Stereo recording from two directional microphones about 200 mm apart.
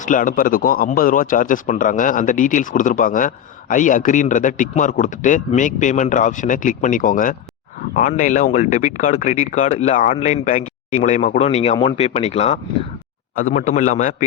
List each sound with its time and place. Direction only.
0.0 s speech: 40° left (ahead or behind)